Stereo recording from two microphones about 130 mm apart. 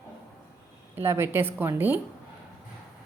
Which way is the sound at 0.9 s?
20° right (ahead or behind).